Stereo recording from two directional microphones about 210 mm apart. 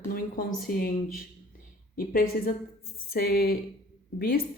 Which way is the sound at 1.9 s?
45° left (ahead or behind).